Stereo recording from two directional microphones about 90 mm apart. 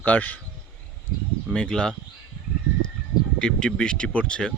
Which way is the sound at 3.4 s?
10° left (ahead or behind).